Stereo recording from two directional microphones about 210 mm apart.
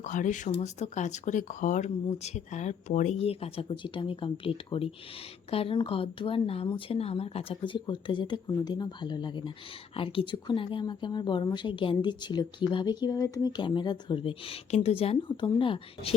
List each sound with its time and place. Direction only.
0.0 s speech: 40° left (ahead or behind)